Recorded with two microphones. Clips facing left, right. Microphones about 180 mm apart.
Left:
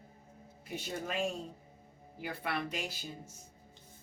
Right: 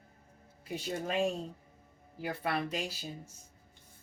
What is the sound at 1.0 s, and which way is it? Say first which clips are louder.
Speech: right 5 dB; 30° right (ahead or behind).